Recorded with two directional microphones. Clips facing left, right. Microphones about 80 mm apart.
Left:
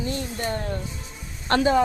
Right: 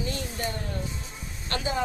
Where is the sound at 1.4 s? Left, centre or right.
Left.